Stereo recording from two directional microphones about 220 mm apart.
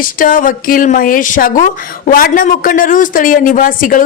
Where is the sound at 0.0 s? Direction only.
40° left (ahead or behind).